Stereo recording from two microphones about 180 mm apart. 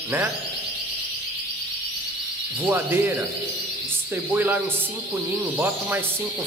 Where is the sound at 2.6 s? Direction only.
10° right (ahead or behind).